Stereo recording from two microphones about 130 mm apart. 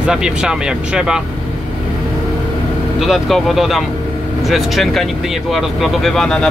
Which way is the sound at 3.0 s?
Centre (ahead or behind).